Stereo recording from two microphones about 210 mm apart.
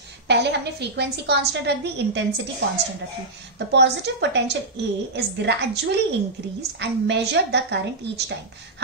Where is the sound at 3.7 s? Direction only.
55° right (ahead or behind).